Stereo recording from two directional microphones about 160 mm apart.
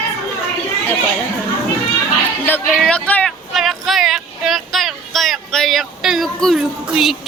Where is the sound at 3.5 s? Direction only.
Centre (ahead or behind).